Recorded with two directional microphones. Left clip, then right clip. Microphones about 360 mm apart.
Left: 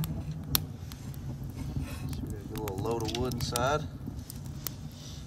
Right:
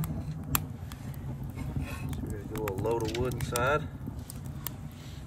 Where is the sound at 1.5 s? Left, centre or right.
Centre.